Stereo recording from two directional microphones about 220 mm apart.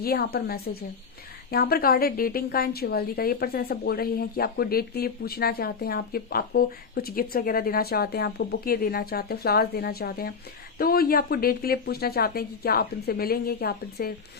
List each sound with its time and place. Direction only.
0.0 s a woman's voice: 45° left (ahead or behind)